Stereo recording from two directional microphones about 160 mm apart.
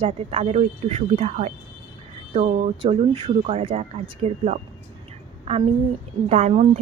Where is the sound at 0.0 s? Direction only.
40° right (ahead or behind).